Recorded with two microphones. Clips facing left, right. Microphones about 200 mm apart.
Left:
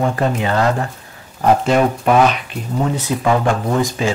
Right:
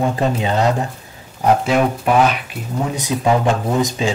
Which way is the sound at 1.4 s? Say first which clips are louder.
Left 1 dB; 5° right (ahead or behind).